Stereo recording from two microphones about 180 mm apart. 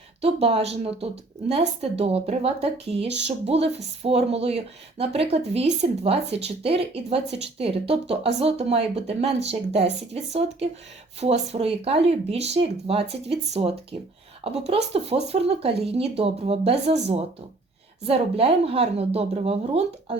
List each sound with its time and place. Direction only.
0.2 s speech: 35° right (ahead or behind)
11.2 s speech: 35° right (ahead or behind)